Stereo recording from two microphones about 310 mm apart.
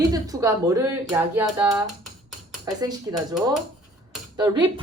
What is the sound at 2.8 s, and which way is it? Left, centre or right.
A woman's voice, centre.